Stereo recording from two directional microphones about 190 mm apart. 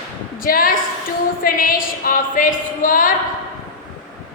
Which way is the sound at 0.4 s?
50° left (ahead or behind).